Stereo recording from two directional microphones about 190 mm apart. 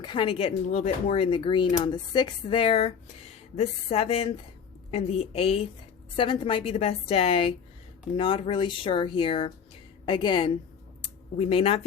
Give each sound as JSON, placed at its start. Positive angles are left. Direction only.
{"t": 0.0, "sound": "speech", "side_deg": 25}